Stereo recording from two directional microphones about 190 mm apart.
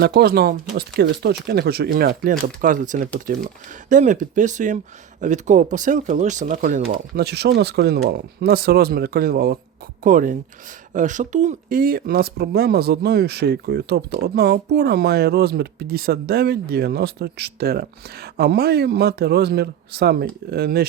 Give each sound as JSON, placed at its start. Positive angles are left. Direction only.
{"t": 0.0, "sound": "speech", "side_deg": -60}
{"t": 6.9, "sound": "speech", "side_deg": -55}